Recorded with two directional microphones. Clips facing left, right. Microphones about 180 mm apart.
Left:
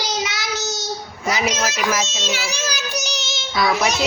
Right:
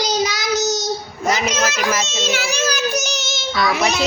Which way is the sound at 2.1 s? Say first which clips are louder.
Right 4 dB; 55° right (ahead or behind).